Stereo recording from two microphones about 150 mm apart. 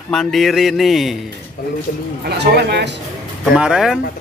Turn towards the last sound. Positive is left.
turn(degrees=-5)  # may be behind; listen again after turning